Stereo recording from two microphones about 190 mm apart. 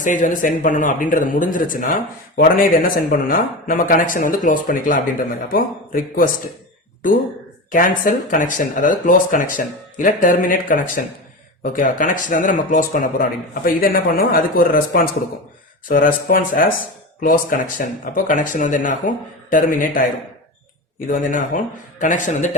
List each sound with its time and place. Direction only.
0.0 s speech: 40° left (ahead or behind)
7.7 s speech: 45° left (ahead or behind)
21.1 s a man's voice: 45° left (ahead or behind)